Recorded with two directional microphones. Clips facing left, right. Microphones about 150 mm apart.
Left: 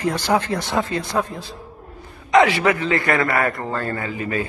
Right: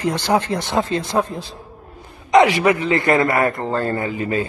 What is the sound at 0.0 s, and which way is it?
A man's voice, 20° right (ahead or behind).